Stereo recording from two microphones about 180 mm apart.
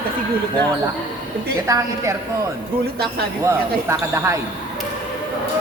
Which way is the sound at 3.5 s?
15° right (ahead or behind).